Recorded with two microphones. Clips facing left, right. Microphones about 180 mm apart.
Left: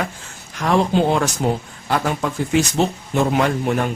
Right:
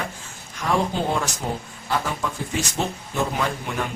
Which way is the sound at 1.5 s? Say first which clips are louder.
Left 8 dB; 85° left.